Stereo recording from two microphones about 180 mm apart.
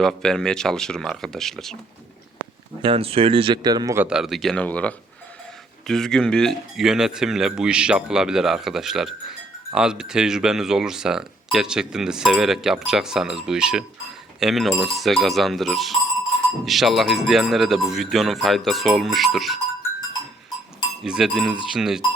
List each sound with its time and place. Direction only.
0.0 s speech: 5° left (ahead or behind)
2.8 s speech: 30° right (ahead or behind)
4.0 s speech: 5° right (ahead or behind)
21.0 s speech: centre (ahead or behind)